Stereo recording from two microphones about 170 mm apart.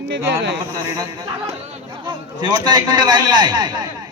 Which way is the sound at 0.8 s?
20° right (ahead or behind).